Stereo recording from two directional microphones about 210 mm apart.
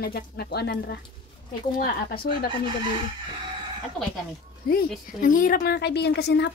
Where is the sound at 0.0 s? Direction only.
50° left (ahead or behind).